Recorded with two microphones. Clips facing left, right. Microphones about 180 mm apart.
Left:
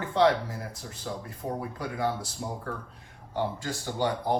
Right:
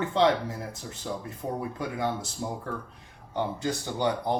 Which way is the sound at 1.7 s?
25° right (ahead or behind).